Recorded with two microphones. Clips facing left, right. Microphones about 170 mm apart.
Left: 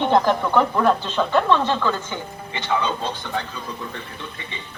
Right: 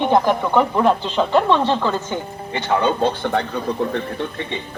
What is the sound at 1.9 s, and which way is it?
Speech, 45° right (ahead or behind).